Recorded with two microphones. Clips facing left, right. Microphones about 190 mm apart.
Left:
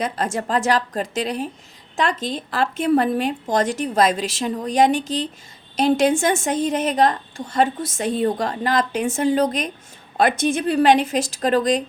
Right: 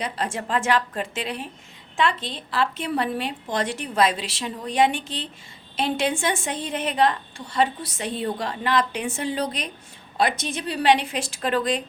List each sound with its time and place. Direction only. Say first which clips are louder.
0.0 s a woman's voice: left 5 dB; 45° left (ahead or behind)